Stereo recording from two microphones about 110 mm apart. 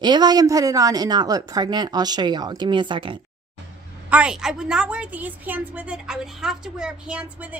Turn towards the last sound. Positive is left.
turn(degrees=-15)  # may be behind; listen again after turning